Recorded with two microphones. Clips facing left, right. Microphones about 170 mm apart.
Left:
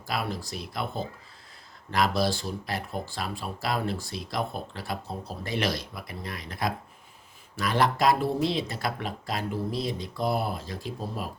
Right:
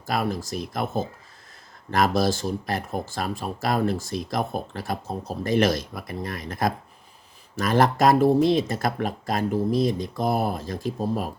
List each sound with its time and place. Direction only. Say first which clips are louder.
0.1 s speech: right 6 dB; 45° right (ahead or behind)